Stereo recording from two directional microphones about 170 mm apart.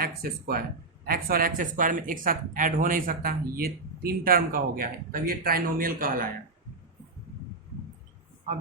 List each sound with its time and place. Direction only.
0.0 s speech: 60° right (ahead or behind)